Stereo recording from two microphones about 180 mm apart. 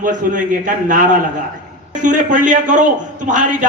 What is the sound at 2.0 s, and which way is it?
A man's voice, 45° right (ahead or behind).